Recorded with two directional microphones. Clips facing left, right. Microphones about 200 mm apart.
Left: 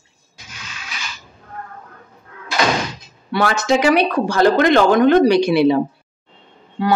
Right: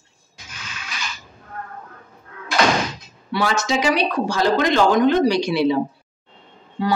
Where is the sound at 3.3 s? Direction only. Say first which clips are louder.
Left 4 dB; 55° left (ahead or behind).